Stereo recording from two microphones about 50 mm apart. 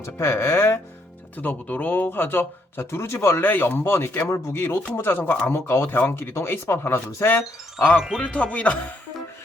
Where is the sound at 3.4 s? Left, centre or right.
Left.